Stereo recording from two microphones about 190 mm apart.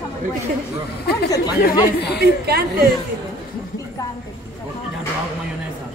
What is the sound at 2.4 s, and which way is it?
Speech, 55° right (ahead or behind).